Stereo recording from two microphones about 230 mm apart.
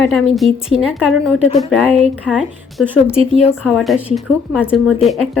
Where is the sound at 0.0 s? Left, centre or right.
Centre.